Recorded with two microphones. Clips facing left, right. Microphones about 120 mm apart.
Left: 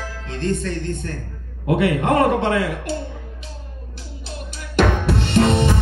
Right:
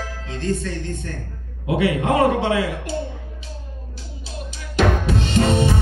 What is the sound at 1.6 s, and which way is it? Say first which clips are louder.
A man's voice: left 1 dB; 50° left (ahead or behind).